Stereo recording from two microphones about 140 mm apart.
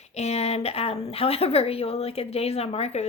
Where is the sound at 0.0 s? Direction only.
50° left (ahead or behind).